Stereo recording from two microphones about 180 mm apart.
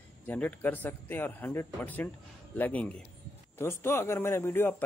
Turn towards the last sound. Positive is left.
turn(degrees=10)  # may be behind; listen again after turning